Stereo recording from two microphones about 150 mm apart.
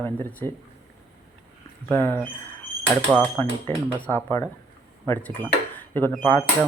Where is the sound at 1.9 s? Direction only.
15° left (ahead or behind).